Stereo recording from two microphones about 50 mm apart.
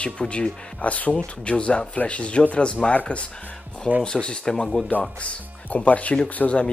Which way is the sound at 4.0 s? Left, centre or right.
Centre.